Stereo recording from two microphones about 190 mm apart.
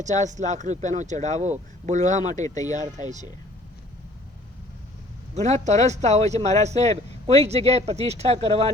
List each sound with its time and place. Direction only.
0.0 s speech: 40° right (ahead or behind)
2.6 s speech: 20° left (ahead or behind)
5.3 s speech: 35° right (ahead or behind)